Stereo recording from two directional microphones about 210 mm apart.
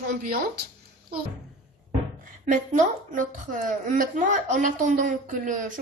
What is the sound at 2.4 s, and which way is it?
A woman's voice, 40° right (ahead or behind).